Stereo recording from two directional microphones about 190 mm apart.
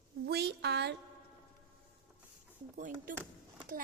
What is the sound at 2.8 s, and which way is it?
Speech, 45° right (ahead or behind).